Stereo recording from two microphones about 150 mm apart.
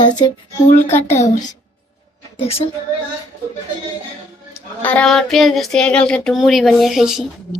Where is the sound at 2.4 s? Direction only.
40° left (ahead or behind).